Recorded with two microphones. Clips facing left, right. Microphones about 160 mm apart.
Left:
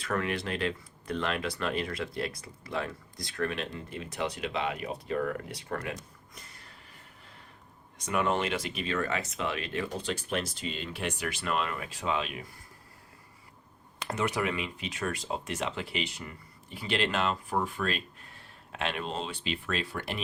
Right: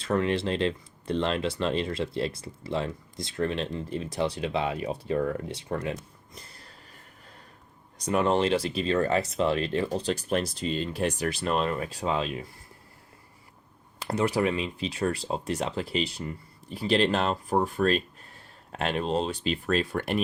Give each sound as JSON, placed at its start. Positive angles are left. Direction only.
{"t": 0.0, "sound": "speech", "side_deg": -25}
{"t": 6.3, "sound": "a sound", "side_deg": -35}
{"t": 7.9, "sound": "speech", "side_deg": -35}
{"t": 14.1, "sound": "speech", "side_deg": -35}